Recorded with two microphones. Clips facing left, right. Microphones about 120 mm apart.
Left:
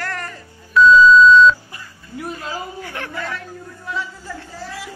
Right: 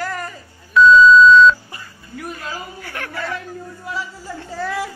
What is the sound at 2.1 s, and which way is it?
Speech, 25° left (ahead or behind).